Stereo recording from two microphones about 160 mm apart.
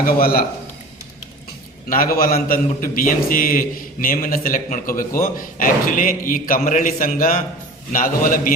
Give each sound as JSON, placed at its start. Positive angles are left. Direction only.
{"t": 0.0, "sound": "a man's voice", "side_deg": 65}
{"t": 2.1, "sound": "a man's voice", "side_deg": 65}